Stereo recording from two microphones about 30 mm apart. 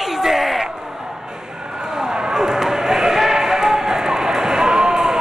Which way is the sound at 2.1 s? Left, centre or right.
Right.